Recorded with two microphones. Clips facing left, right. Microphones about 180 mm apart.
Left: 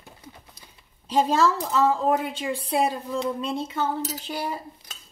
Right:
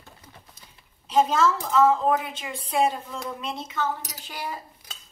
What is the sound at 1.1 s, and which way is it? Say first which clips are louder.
A woman's voice: even; 35° left (ahead or behind).